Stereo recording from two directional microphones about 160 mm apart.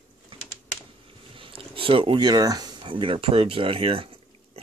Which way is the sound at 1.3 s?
35° right (ahead or behind).